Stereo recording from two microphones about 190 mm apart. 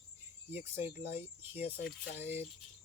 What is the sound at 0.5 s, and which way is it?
Speech, 10° right (ahead or behind).